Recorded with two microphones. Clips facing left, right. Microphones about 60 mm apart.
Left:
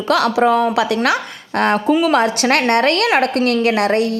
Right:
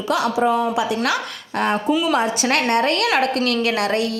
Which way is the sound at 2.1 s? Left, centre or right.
Left.